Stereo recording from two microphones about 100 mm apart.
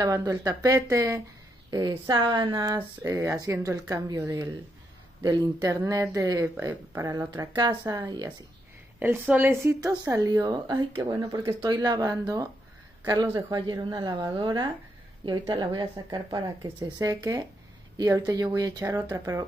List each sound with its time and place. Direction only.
0.0 s speech: 35° right (ahead or behind)
1.7 s a woman's voice: 40° right (ahead or behind)
3.0 s a woman's voice: 30° right (ahead or behind)
6.7 s a woman's voice: 20° right (ahead or behind)
7.5 s a woman's voice: 40° right (ahead or behind)
9.3 s a woman's voice: 20° right (ahead or behind)
11.7 s a woman's voice: 45° right (ahead or behind)
19.0 s a woman's voice: 25° right (ahead or behind)